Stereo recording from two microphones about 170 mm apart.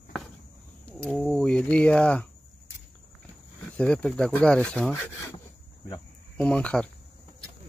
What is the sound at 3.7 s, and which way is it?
Speech, 5° left (ahead or behind).